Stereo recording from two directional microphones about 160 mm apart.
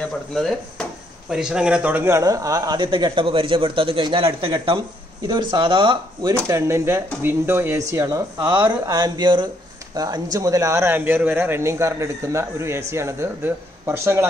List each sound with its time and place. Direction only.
0.3 s a man's voice: centre (ahead or behind); by 6.3 s 30° right (ahead or behind)
6.3 s a man's voice: 15° right (ahead or behind)